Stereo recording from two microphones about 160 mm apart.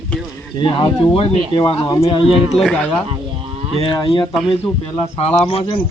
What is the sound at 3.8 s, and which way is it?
Speech, 30° left (ahead or behind).